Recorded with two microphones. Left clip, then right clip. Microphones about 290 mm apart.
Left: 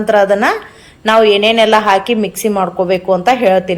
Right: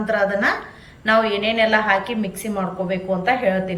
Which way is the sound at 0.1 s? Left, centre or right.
Centre.